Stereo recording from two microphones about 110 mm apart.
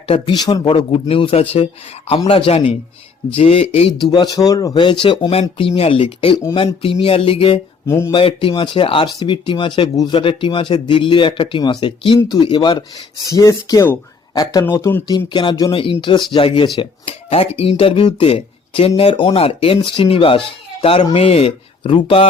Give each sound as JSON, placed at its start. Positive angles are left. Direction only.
{"t": 0.3, "sound": "speech", "side_deg": 40}
{"t": 4.1, "sound": "speech", "side_deg": 40}
{"t": 4.8, "sound": "speech", "side_deg": 50}
{"t": 7.9, "sound": "speech", "side_deg": 25}
{"t": 8.1, "sound": "speech", "side_deg": 50}
{"t": 13.3, "sound": "speech", "side_deg": 30}
{"t": 14.6, "sound": "speech", "side_deg": 20}
{"t": 15.3, "sound": "speech", "side_deg": 45}
{"t": 15.7, "sound": "speech", "side_deg": 50}
{"t": 17.2, "sound": "speech", "side_deg": 85}
{"t": 17.6, "sound": "speech", "side_deg": 60}